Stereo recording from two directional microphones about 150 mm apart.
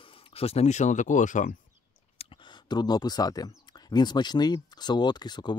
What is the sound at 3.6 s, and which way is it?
Speech, 25° left (ahead or behind).